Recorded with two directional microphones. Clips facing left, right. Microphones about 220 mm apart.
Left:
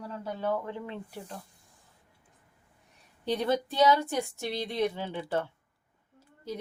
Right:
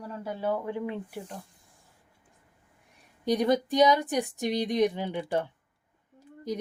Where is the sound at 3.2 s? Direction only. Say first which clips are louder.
Right 4 dB; 15° right (ahead or behind).